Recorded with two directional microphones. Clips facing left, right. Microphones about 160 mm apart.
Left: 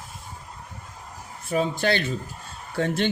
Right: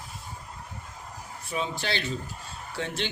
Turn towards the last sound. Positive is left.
turn(degrees=50)  # may be behind; listen again after turning